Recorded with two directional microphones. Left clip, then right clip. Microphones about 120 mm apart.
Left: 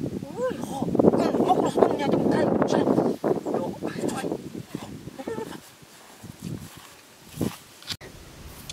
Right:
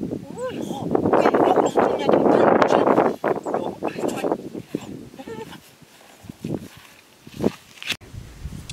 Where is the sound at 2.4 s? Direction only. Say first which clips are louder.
Right 7 dB; 30° right (ahead or behind).